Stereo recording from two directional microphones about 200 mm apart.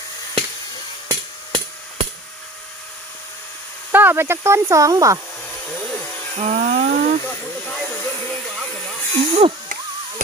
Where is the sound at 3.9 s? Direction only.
10° right (ahead or behind).